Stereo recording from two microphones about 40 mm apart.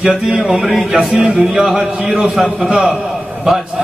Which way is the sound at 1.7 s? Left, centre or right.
Centre.